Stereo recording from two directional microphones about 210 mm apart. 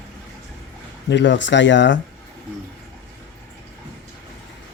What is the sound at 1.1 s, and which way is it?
Speech, 60° left (ahead or behind).